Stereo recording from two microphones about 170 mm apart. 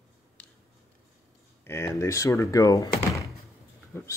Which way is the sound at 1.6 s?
15° left (ahead or behind).